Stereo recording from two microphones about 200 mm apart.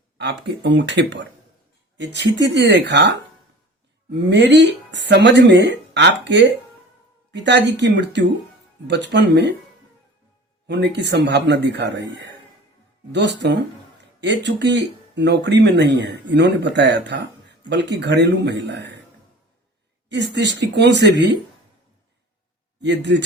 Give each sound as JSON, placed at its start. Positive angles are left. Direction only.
{"t": 0.2, "sound": "speech", "side_deg": -60}
{"t": 4.3, "sound": "speech", "side_deg": -60}
{"t": 10.7, "sound": "speech", "side_deg": -60}
{"t": 20.1, "sound": "speech", "side_deg": -60}
{"t": 22.8, "sound": "speech", "side_deg": -60}